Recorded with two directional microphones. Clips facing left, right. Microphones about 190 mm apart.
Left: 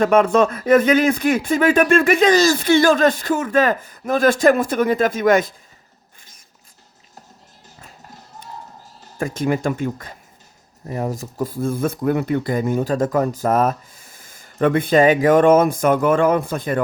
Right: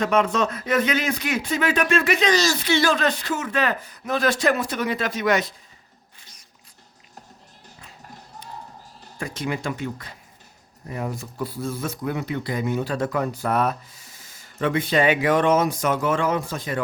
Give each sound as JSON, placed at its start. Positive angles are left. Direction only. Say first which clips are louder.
{"t": 0.0, "sound": "speech", "louder": "left 7 dB", "side_deg": 50}
{"t": 9.1, "sound": "speech", "louder": "left 8 dB", "side_deg": 50}